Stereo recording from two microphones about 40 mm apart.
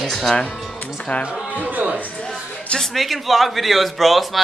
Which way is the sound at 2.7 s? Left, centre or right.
Centre.